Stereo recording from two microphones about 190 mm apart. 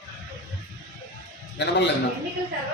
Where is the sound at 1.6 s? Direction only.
65° left (ahead or behind).